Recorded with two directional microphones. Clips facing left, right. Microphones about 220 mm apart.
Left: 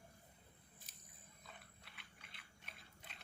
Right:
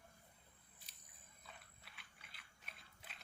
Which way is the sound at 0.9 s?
45° left (ahead or behind).